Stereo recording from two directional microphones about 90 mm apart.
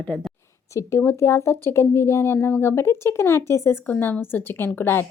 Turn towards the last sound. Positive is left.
turn(degrees=25)  # may be behind; listen again after turning